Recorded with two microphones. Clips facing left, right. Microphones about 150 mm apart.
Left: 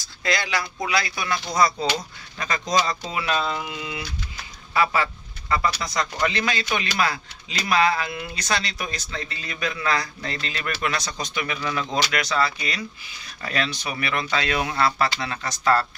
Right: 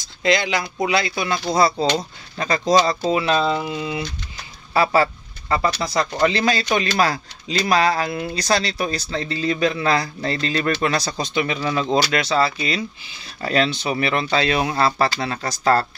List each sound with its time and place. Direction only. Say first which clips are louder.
0.0 s speech: right 7 dB; 20° right (ahead or behind)